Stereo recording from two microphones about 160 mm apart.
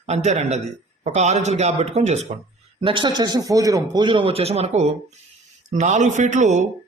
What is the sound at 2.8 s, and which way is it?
A man's voice, 30° right (ahead or behind).